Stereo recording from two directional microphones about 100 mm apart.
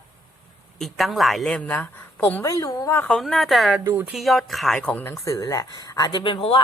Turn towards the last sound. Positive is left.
turn(degrees=55)  # may be behind; listen again after turning